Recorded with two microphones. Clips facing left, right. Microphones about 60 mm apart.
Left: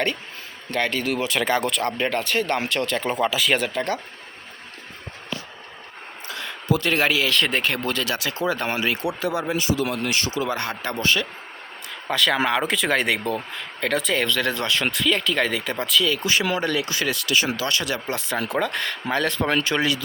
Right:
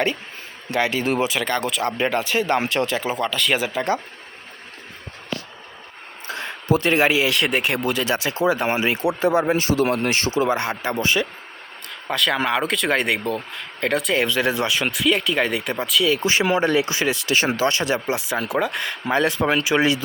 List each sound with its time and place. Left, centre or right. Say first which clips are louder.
0.7 s speech: right 2 dB; centre
1.0 s speech: right 4 dB; right
1.5 s speech: left 1 dB; centre
1.7 s speech: right 2 dB; centre
2.9 s speech: left 1 dB; centre
6.2 s speech: right 2 dB; right
12.0 s speech: even; centre
16.0 s speech: right 3 dB; right
18.0 s speech: right 2 dB; centre